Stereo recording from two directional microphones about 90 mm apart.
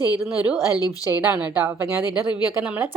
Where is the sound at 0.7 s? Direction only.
45° left (ahead or behind).